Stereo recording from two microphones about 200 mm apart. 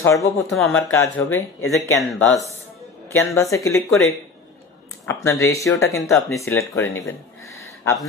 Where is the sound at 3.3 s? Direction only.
15° left (ahead or behind).